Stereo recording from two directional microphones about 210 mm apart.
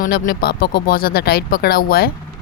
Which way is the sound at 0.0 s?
45° left (ahead or behind).